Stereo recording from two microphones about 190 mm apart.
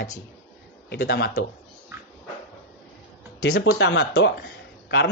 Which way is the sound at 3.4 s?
60° left (ahead or behind).